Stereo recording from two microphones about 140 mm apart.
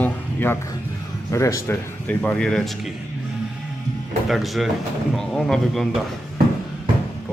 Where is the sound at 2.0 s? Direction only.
10° left (ahead or behind).